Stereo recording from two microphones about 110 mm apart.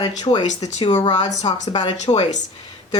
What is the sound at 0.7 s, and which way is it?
Speech, 90° left.